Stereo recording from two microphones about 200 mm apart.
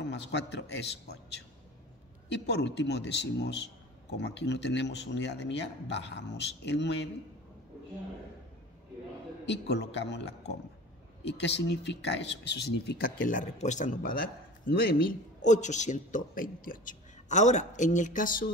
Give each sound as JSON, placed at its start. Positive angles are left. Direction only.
{"t": 0.0, "sound": "a man's voice", "side_deg": 60}
{"t": 9.5, "sound": "a man's voice", "side_deg": 60}